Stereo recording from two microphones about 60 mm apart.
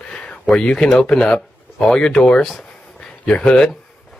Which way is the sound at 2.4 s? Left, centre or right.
Centre.